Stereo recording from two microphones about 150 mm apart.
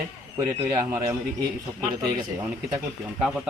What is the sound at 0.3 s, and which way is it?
A man's voice, 20° right (ahead or behind).